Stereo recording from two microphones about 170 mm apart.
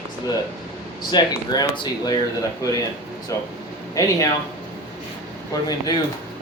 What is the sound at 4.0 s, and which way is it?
Speech, 20° left (ahead or behind).